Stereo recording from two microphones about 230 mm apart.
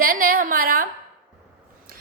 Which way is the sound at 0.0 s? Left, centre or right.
Right.